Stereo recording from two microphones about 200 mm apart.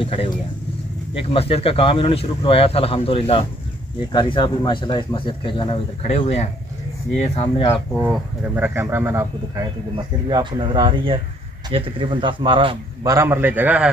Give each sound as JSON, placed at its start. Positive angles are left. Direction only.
{"t": 0.0, "sound": "speech", "side_deg": 30}
{"t": 8.0, "sound": "a man's voice", "side_deg": -10}